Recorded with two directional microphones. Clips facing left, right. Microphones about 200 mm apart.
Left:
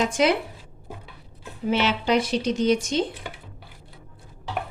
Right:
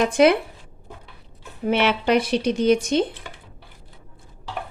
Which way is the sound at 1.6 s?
60° right (ahead or behind).